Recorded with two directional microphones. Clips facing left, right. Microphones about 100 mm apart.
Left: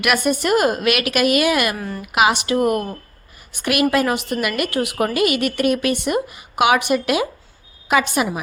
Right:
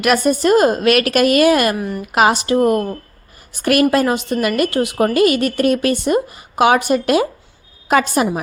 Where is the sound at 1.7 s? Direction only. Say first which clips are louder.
Right 5 dB; 15° right (ahead or behind).